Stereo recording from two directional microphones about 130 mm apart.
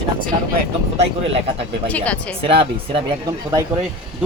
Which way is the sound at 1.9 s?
10° left (ahead or behind).